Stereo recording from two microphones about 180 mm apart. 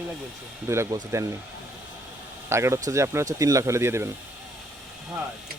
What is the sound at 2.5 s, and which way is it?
A man's voice, 15° right (ahead or behind).